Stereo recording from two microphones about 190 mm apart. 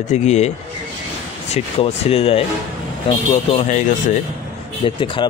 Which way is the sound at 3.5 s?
40° left (ahead or behind).